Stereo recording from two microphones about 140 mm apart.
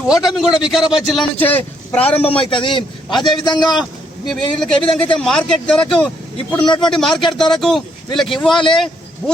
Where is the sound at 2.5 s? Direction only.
35° left (ahead or behind).